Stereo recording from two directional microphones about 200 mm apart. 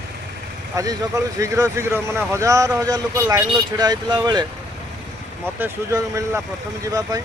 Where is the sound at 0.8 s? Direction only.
15° right (ahead or behind).